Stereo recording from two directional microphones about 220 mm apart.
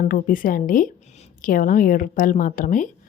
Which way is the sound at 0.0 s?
40° left (ahead or behind).